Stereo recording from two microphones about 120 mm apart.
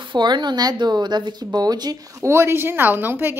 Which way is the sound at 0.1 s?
40° right (ahead or behind).